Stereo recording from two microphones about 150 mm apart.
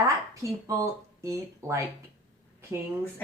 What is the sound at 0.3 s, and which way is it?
Speech, 20° right (ahead or behind).